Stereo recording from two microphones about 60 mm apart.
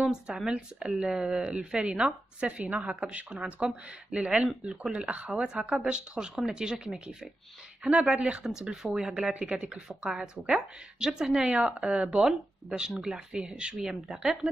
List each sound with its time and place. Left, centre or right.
0.0 s speech: centre